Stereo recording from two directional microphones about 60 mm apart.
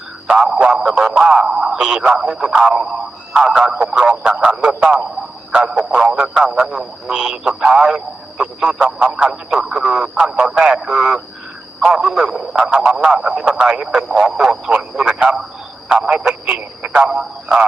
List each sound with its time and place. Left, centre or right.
0.4 s a man's voice: centre
4.4 s a man's voice: centre
15.9 s a sound: right